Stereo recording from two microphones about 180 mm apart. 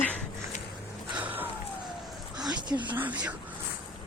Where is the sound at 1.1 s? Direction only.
10° right (ahead or behind).